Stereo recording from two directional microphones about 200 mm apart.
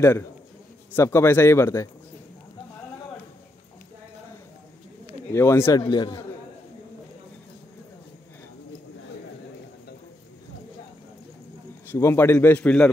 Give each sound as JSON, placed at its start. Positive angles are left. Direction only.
{"t": 0.9, "sound": "a man's voice", "side_deg": 15}
{"t": 5.3, "sound": "a man's voice", "side_deg": 15}
{"t": 11.9, "sound": "a man's voice", "side_deg": 10}